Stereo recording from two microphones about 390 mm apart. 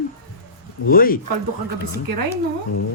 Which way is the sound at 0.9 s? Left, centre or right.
Left.